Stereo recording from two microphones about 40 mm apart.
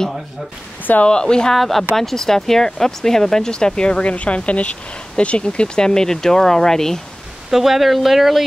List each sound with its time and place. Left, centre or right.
1.0 s speech: left
1.5 s speech: centre
7.5 s speech: centre